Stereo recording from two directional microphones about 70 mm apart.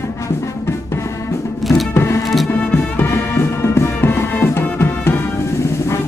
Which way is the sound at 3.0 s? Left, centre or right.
Left.